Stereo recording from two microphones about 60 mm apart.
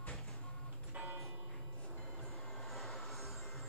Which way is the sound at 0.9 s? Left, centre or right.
Right.